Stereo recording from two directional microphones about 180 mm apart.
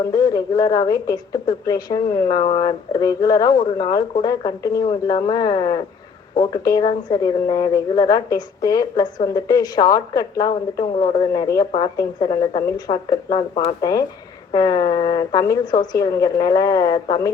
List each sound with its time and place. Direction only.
0.1 s a woman's voice: 20° left (ahead or behind)